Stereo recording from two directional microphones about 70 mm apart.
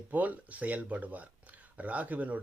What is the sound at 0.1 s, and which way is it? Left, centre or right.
Speech, right.